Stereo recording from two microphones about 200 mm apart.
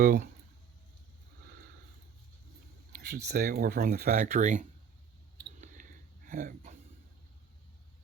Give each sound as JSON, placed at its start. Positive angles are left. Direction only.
{"t": 0.0, "sound": "speech", "side_deg": -40}
{"t": 3.2, "sound": "speech", "side_deg": -50}
{"t": 5.5, "sound": "a sound", "side_deg": -40}